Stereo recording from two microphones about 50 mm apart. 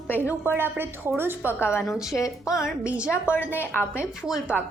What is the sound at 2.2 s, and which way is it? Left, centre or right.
Speech, left.